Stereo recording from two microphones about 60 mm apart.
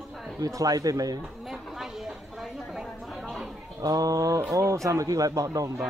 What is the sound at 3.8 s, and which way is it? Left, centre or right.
Speech, right.